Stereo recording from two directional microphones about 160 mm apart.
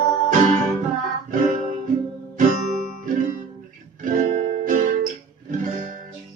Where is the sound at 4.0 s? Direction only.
50° right (ahead or behind).